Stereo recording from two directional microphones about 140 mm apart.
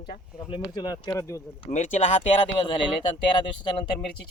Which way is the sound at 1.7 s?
55° left (ahead or behind).